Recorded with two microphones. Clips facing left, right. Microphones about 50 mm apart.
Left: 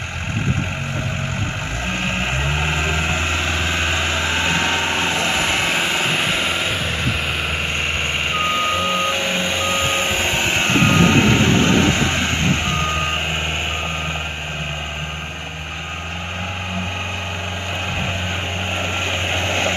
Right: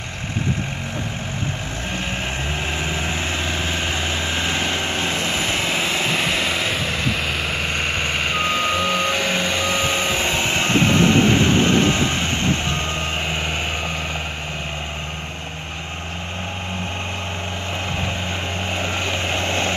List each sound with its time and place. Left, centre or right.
4.5 s vehicle: left
4.9 s vehicle: left
5.8 s vehicle: left
8.3 s reversing beeps: centre
10.3 s train: left
18.8 s vehicle: left